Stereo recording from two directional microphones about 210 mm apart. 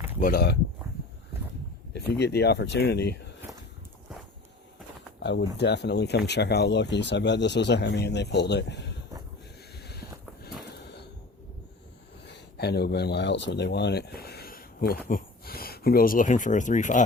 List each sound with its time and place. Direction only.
0.2 s speech: 45° left (ahead or behind)
1.9 s speech: 55° left (ahead or behind)
5.2 s speech: 55° left (ahead or behind)
9.7 s a sound: 50° left (ahead or behind)
12.2 s speech: 55° left (ahead or behind); by 17.0 s 35° left (ahead or behind)